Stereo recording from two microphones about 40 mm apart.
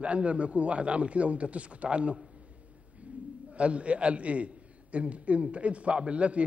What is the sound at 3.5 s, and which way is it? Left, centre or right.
A man's voice, right.